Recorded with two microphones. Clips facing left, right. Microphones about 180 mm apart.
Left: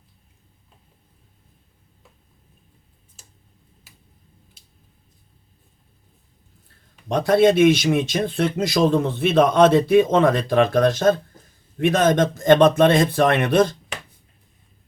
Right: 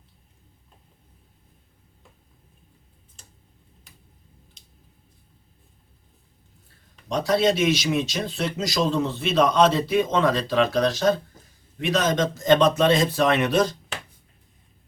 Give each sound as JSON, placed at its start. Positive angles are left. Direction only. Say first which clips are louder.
{"t": 3.2, "sound": "tick-tock", "louder": "even", "side_deg": 5}
{"t": 4.6, "sound": "a sound", "louder": "right 1 dB", "side_deg": 5}
{"t": 7.1, "sound": "speech", "louder": "left 5 dB", "side_deg": 55}